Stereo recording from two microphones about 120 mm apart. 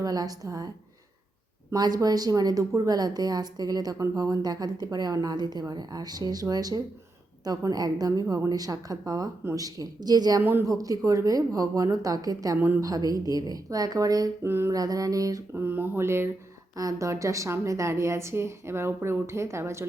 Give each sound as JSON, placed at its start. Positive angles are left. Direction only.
{"t": 0.0, "sound": "a woman's voice", "side_deg": -30}
{"t": 1.7, "sound": "a woman's voice", "side_deg": -35}
{"t": 10.4, "sound": "a woman's voice", "side_deg": -20}
{"t": 12.5, "sound": "a woman's voice", "side_deg": -15}
{"t": 12.8, "sound": "a woman's voice", "side_deg": -30}
{"t": 14.4, "sound": "a woman's voice", "side_deg": -20}
{"t": 14.8, "sound": "a woman's voice", "side_deg": -30}
{"t": 15.5, "sound": "a woman's voice", "side_deg": -15}